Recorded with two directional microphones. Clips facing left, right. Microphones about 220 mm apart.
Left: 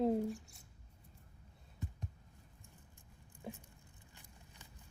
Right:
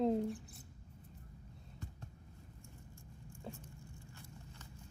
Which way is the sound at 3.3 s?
15° left (ahead or behind).